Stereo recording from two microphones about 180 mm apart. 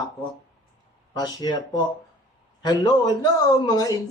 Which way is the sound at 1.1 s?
20° left (ahead or behind).